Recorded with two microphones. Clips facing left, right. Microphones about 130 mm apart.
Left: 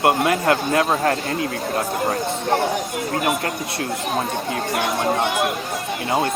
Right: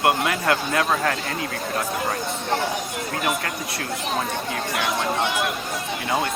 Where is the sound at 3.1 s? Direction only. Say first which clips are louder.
Left 4 dB; 40° left (ahead or behind).